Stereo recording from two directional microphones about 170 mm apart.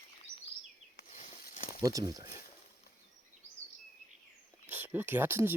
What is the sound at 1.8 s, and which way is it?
Speech, 20° right (ahead or behind).